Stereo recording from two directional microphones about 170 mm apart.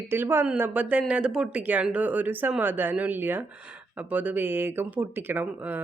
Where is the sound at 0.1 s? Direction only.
15° right (ahead or behind).